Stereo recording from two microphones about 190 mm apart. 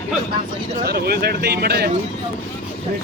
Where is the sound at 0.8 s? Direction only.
55° right (ahead or behind).